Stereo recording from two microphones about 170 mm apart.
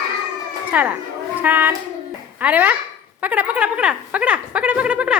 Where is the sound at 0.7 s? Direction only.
10° right (ahead or behind).